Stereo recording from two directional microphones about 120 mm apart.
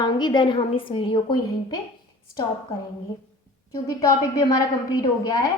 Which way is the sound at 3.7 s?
30° left (ahead or behind).